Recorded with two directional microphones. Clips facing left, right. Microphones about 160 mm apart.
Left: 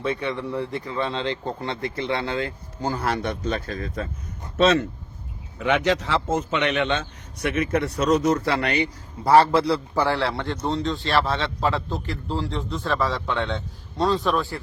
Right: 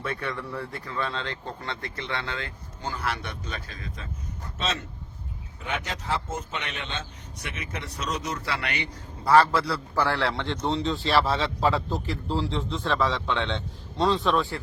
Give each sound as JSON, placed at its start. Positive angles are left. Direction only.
{"t": 0.0, "sound": "speech", "side_deg": 20}
{"t": 4.5, "sound": "speech", "side_deg": 65}
{"t": 5.5, "sound": "a man's voice", "side_deg": 90}
{"t": 9.2, "sound": "a man's voice", "side_deg": 30}